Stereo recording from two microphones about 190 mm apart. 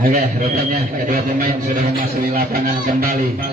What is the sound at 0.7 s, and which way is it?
Speech, 50° right (ahead or behind).